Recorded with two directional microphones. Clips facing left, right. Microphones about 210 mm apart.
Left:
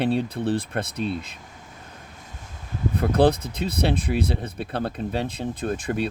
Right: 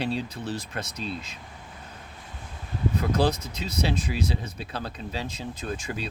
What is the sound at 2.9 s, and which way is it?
Speech, 55° left (ahead or behind).